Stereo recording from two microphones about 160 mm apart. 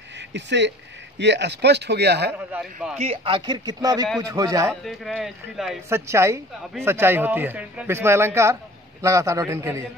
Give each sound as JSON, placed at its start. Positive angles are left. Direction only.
{"t": 0.3, "sound": "speech", "side_deg": -90}
{"t": 2.3, "sound": "speech", "side_deg": -5}
{"t": 3.0, "sound": "speech", "side_deg": -35}
{"t": 4.8, "sound": "speech", "side_deg": 0}
{"t": 5.9, "sound": "a man's voice", "side_deg": -15}